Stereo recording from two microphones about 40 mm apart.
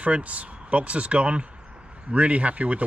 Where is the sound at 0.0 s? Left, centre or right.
Right.